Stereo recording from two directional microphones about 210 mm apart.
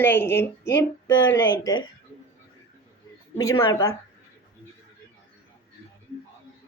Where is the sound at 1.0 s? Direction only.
60° left (ahead or behind).